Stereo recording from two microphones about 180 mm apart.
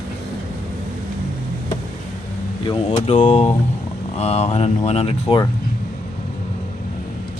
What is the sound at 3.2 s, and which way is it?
Speech, 40° left (ahead or behind).